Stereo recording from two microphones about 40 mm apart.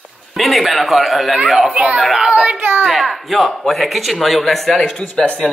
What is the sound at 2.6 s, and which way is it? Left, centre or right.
Speech, right.